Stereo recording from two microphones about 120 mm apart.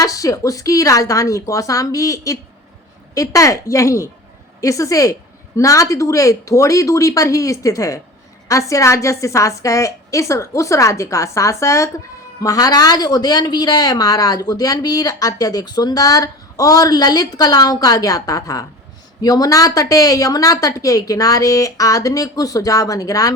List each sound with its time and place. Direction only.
0.0 s a woman's voice: 30° left (ahead or behind)